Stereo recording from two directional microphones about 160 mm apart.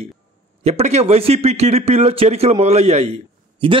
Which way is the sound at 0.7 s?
40° right (ahead or behind).